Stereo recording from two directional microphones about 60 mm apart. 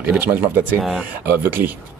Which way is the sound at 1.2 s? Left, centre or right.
Right.